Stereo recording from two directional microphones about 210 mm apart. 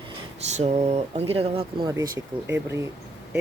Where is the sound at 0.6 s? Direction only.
30° right (ahead or behind).